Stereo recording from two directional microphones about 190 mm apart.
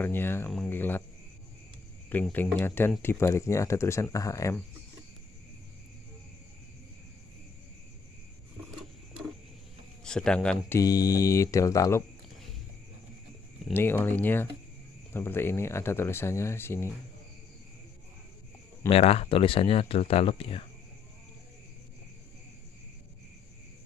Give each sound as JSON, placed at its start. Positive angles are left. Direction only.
{"t": 0.0, "sound": "speech", "side_deg": 10}
{"t": 0.5, "sound": "a sound", "side_deg": 5}
{"t": 2.0, "sound": "speech", "side_deg": 10}
{"t": 10.0, "sound": "speech", "side_deg": 5}
{"t": 10.8, "sound": "speech", "side_deg": 20}
{"t": 13.7, "sound": "speech", "side_deg": 10}
{"t": 18.9, "sound": "speech", "side_deg": 30}